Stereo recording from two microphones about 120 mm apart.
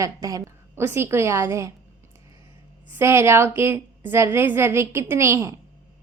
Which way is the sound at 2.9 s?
20° right (ahead or behind).